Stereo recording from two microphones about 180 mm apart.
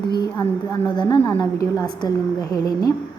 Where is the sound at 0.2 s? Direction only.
20° left (ahead or behind).